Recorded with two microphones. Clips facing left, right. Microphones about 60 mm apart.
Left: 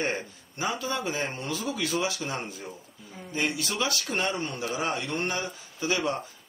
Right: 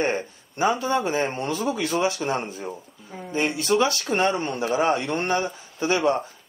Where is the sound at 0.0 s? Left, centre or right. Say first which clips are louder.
Right 6 dB; right.